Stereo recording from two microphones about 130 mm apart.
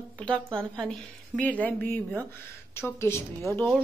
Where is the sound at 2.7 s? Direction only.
20° left (ahead or behind).